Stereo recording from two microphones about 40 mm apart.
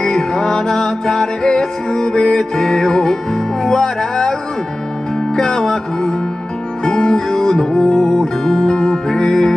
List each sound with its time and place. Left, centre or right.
0.0 s music: centre
2.5 s music: centre
5.3 s music: left
6.8 s music: centre